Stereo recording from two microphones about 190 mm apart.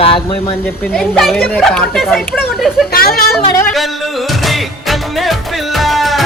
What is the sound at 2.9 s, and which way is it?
Speech, 50° left (ahead or behind).